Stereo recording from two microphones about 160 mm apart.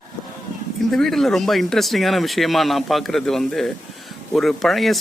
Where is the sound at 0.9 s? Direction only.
5° left (ahead or behind).